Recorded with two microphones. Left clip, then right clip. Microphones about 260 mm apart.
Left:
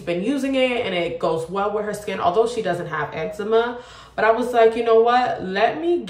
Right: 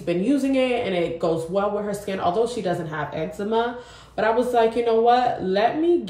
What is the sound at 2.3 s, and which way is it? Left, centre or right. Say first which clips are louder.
Speech: left 3 dB; centre.